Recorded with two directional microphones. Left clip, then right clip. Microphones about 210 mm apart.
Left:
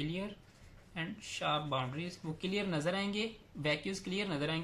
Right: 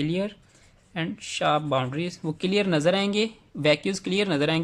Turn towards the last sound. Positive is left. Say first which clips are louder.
# right 13 dB
turn(degrees=-45)  # may be behind; listen again after turning